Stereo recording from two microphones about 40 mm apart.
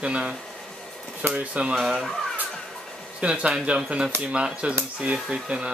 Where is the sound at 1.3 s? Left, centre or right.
Right.